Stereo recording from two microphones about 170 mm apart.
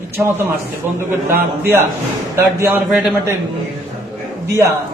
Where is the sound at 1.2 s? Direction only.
15° right (ahead or behind).